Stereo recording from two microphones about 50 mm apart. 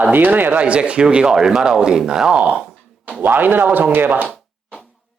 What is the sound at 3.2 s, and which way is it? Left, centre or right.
Speech, right.